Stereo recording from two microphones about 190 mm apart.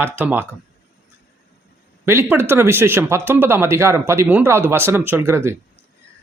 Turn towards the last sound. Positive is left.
turn(degrees=-15)  # may be behind; listen again after turning